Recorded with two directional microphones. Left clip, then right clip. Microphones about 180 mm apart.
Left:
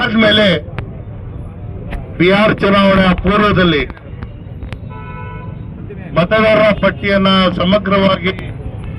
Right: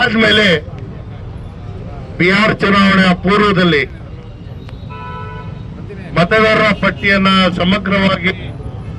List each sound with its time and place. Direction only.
0.0 s a man's voice: 20° right (ahead or behind)
2.1 s a man's voice: 20° right (ahead or behind)
6.1 s a man's voice: 20° right (ahead or behind)